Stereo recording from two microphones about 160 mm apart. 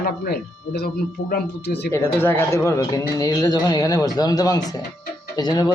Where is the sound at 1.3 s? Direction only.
90° left.